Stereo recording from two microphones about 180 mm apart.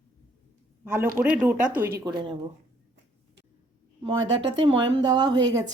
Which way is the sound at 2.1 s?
25° right (ahead or behind).